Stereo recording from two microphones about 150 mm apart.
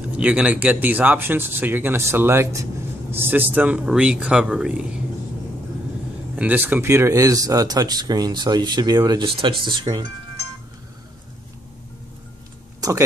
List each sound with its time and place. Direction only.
0.2 s speech: 5° right (ahead or behind)
6.3 s speech: 10° right (ahead or behind); by 10.0 s 30° right (ahead or behind)